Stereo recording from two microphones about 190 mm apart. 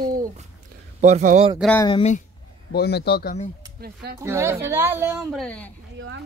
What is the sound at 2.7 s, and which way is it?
Speech, 60° left (ahead or behind).